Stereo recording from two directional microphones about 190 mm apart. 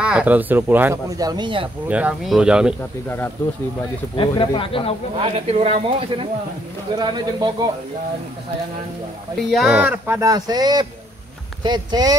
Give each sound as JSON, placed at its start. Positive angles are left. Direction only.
{"t": 0.0, "sound": "speech", "side_deg": -5}
{"t": 1.9, "sound": "speech", "side_deg": -5}
{"t": 2.8, "sound": "speech", "side_deg": 10}
{"t": 4.2, "sound": "speech", "side_deg": 25}
{"t": 5.2, "sound": "speech", "side_deg": -30}
{"t": 9.5, "sound": "speech", "side_deg": -5}